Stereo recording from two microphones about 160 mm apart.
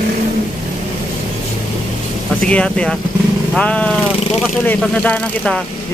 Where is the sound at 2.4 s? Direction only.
5° left (ahead or behind).